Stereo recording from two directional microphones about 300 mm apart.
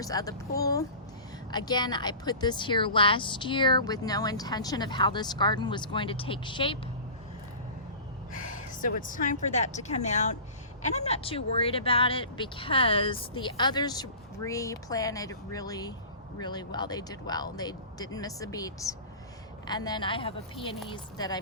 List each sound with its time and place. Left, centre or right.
0.0 s speech: centre
8.4 s speech: left